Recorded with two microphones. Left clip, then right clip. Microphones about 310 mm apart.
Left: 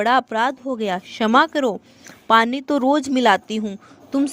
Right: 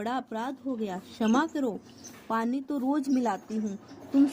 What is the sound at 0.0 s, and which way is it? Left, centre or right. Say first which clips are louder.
Speech: left 15 dB; left.